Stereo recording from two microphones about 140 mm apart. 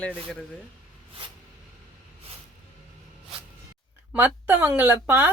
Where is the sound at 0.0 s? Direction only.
10° left (ahead or behind).